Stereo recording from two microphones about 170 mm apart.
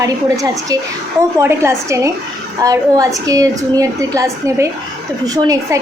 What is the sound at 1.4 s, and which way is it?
A woman's voice, 15° right (ahead or behind).